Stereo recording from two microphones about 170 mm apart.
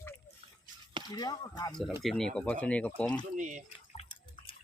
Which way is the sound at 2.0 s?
5° left (ahead or behind).